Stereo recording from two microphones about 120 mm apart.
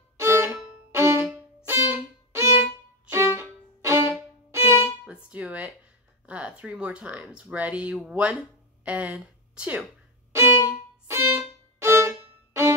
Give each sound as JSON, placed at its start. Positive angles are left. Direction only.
{"t": 0.2, "sound": "violin", "side_deg": -20}
{"t": 0.9, "sound": "music", "side_deg": -20}
{"t": 1.7, "sound": "violin", "side_deg": -20}
{"t": 5.0, "sound": "speech", "side_deg": -10}
{"t": 11.1, "sound": "music", "side_deg": -20}